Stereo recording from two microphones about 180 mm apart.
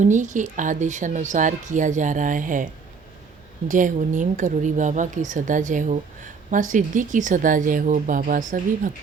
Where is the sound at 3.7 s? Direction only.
45° right (ahead or behind).